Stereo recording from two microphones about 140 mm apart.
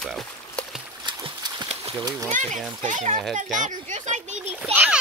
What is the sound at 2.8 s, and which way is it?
Speech, 65° right (ahead or behind).